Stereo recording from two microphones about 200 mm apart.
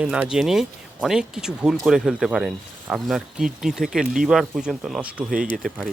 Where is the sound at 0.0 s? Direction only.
5° right (ahead or behind).